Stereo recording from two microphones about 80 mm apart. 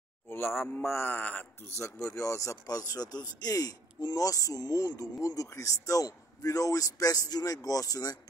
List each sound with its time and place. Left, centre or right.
0.3 s speech: left
1.8 s a man's voice: left